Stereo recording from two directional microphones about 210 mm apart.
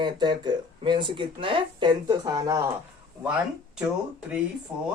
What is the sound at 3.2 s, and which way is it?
Speech, 5° right (ahead or behind).